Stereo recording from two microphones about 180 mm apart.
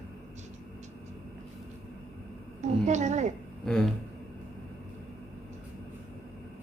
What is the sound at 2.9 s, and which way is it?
Speech, 40° right (ahead or behind).